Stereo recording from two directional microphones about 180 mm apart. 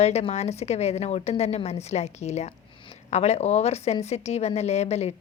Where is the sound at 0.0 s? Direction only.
35° left (ahead or behind).